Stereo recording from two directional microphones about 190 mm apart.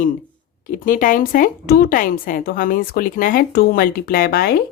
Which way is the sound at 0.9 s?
45° left (ahead or behind).